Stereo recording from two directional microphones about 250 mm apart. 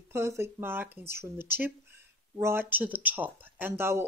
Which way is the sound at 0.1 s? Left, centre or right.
Centre.